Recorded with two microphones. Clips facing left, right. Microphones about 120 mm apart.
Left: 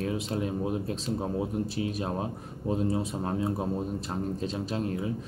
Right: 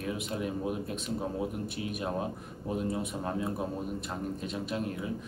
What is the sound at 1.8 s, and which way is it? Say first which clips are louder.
Speech: left 2 dB; 30° left (ahead or behind).